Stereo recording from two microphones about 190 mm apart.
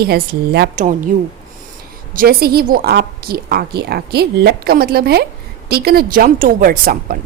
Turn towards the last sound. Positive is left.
turn(degrees=-50)  # may be behind; listen again after turning